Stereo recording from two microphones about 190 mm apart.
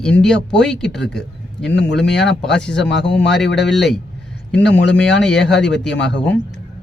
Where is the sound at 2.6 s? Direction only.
65° left (ahead or behind).